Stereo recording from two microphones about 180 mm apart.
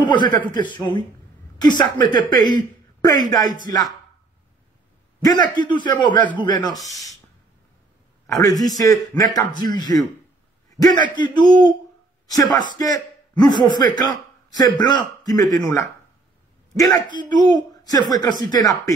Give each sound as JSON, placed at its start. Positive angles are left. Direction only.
{"t": 0.0, "sound": "a man's voice", "side_deg": 25}
{"t": 1.6, "sound": "a man's voice", "side_deg": 25}
{"t": 5.2, "sound": "a man's voice", "side_deg": 25}
{"t": 8.3, "sound": "a man's voice", "side_deg": 20}
{"t": 11.1, "sound": "a man's voice", "side_deg": 25}